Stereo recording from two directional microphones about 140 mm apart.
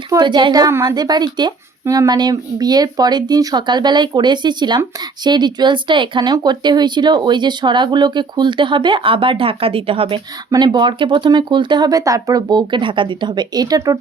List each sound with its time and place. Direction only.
0.1 s speech: 30° right (ahead or behind)